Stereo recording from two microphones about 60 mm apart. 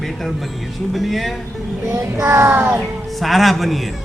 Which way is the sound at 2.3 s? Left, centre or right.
Right.